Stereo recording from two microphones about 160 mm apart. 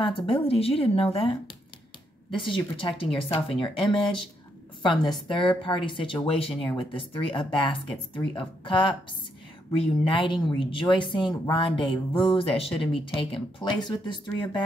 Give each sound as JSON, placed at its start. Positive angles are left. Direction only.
{"t": 0.0, "sound": "speech", "side_deg": 35}
{"t": 2.4, "sound": "speech", "side_deg": 30}